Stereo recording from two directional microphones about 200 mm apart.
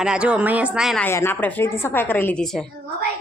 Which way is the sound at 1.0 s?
10° left (ahead or behind).